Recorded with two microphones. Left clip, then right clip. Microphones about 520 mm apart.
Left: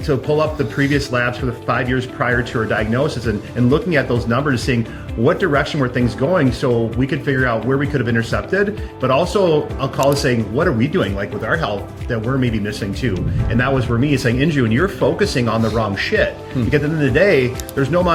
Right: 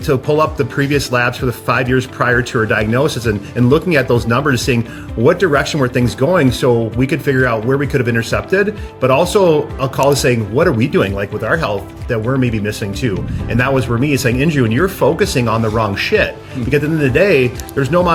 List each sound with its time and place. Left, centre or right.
0.1 s speech: right